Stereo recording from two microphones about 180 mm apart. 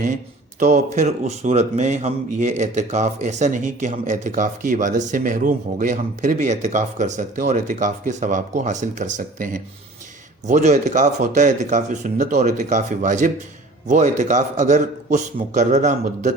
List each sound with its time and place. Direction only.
0.6 s a man's voice: 40° right (ahead or behind)